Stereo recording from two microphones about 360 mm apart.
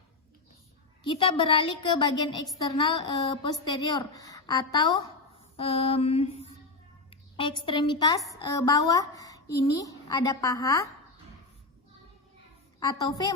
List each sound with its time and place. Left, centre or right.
1.0 s a woman's voice: centre
12.8 s a woman's voice: centre